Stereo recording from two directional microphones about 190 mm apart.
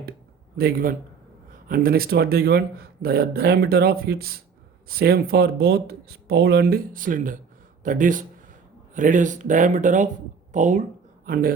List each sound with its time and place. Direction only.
0.5 s speech: 50° right (ahead or behind)